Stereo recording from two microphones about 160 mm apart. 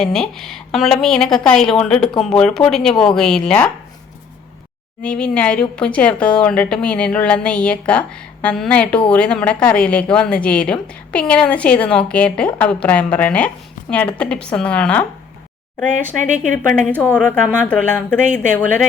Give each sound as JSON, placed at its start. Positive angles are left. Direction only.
{"t": 0.0, "sound": "a woman's voice", "side_deg": 5}
{"t": 5.0, "sound": "a woman's voice", "side_deg": 5}
{"t": 16.1, "sound": "speech", "side_deg": -55}
{"t": 16.7, "sound": "a woman's voice", "side_deg": 10}